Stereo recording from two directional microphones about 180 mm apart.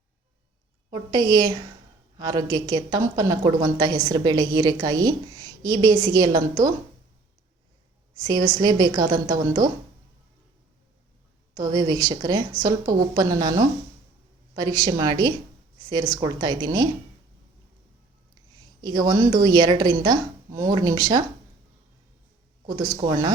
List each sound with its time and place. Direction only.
0.9 s a woman's voice: 20° right (ahead or behind)
8.1 s a woman's voice: 20° right (ahead or behind)
11.5 s a woman's voice: 20° right (ahead or behind)
18.5 s a woman's voice: 20° right (ahead or behind)
23.0 s a woman's voice: 20° right (ahead or behind)